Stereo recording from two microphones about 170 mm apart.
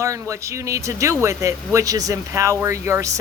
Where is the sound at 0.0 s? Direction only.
15° right (ahead or behind).